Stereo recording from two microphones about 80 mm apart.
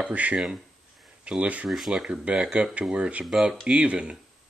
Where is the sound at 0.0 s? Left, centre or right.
Centre.